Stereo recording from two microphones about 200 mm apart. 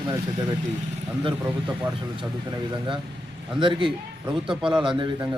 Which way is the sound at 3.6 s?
25° right (ahead or behind).